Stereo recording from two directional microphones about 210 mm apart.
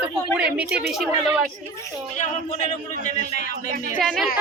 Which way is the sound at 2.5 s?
35° left (ahead or behind).